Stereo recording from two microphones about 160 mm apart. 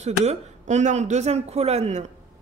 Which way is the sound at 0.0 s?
45° right (ahead or behind).